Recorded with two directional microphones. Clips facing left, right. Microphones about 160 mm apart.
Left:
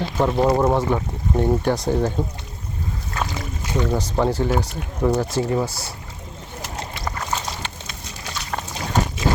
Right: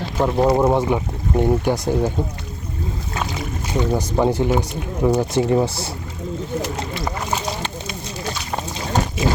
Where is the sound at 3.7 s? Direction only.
15° right (ahead or behind).